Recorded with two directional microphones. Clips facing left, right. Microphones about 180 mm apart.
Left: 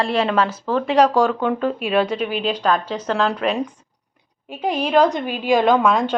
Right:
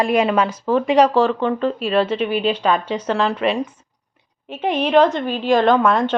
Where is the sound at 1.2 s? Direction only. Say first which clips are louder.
Right 1 dB; 5° left (ahead or behind).